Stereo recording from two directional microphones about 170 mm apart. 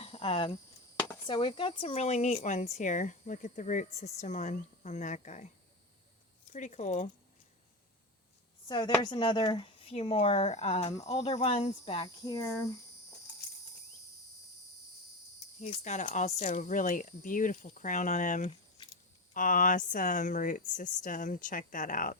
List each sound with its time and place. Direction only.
0.0 s a sound: 35° left (ahead or behind)
1.3 s speech: 25° left (ahead or behind); by 5.5 s 45° left (ahead or behind)
6.5 s speech: 45° left (ahead or behind)
8.6 s a woman's voice: 30° left (ahead or behind)
12.0 s speech: 20° left (ahead or behind)
15.6 s speech: 45° left (ahead or behind)